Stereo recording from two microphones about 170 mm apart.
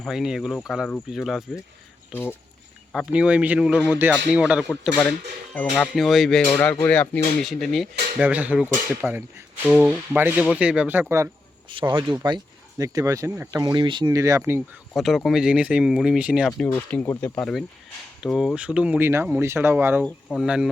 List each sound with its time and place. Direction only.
0.0 s speech: centre (ahead or behind)
2.9 s speech: 5° right (ahead or behind)
4.7 s speech: 5° left (ahead or behind)
6.6 s speech: 10° left (ahead or behind); by 11.0 s 10° right (ahead or behind)
11.7 s speech: 30° right (ahead or behind)
14.9 s speech: centre (ahead or behind)
16.6 s speech: 10° left (ahead or behind); by 20.1 s 10° right (ahead or behind)
20.1 s speech: centre (ahead or behind)